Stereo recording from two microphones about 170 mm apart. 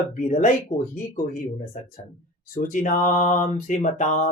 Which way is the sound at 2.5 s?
50° left (ahead or behind).